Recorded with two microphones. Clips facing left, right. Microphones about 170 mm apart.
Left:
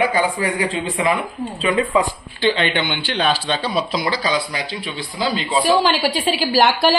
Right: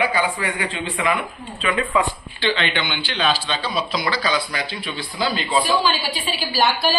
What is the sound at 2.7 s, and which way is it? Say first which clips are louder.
Speech: left 4 dB; 55° left (ahead or behind).